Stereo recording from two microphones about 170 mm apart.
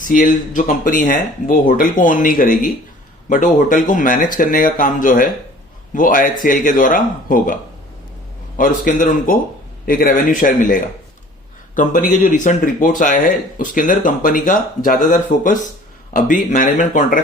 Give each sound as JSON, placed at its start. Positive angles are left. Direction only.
{"t": 0.0, "sound": "speech", "side_deg": 55}
{"t": 8.5, "sound": "a man's voice", "side_deg": 50}